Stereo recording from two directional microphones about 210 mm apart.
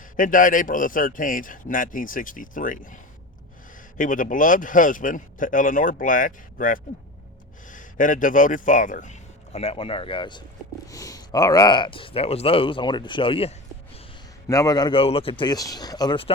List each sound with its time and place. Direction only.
0.2 s a man's voice: 40° left (ahead or behind); by 16.3 s 25° left (ahead or behind)